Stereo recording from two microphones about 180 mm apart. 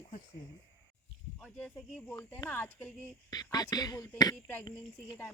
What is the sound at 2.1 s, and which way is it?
Speech, 15° left (ahead or behind).